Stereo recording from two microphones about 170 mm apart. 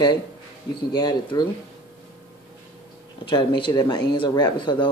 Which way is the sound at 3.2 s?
30° left (ahead or behind).